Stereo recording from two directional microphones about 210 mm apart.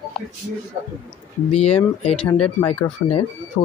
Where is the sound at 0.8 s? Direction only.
25° right (ahead or behind).